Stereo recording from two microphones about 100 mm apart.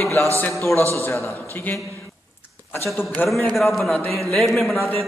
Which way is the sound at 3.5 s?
Centre (ahead or behind).